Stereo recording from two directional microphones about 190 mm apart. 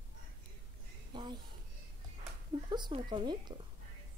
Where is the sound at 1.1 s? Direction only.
25° right (ahead or behind).